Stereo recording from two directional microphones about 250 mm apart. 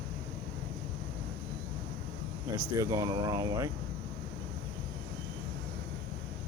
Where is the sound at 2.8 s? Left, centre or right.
Centre.